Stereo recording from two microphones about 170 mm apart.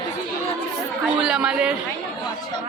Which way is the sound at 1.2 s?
5° right (ahead or behind).